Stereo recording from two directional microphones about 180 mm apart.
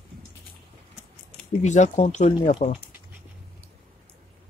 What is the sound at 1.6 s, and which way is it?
Speech, 40° left (ahead or behind).